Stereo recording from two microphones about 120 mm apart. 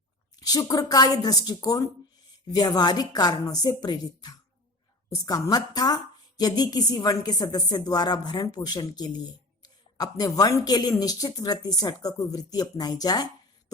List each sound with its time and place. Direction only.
0.3 s a woman's voice: 30° left (ahead or behind)